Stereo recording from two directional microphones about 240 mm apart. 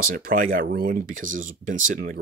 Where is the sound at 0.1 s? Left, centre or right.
Right.